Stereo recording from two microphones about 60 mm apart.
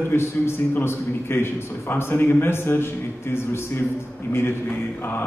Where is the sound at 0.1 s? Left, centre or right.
Left.